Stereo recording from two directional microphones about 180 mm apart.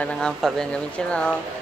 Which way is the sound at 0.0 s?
5° left (ahead or behind).